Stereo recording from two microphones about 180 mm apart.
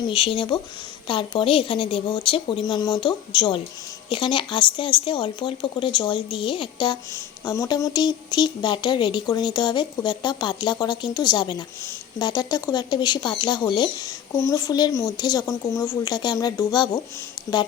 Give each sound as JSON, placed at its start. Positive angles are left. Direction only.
{"t": 0.0, "sound": "speech", "side_deg": 30}